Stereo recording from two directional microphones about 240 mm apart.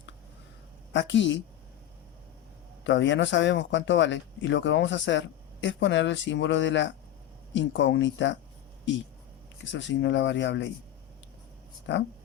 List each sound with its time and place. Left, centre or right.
0.9 s speech: left
2.8 s speech: left
9.7 s speech: left
11.9 s speech: left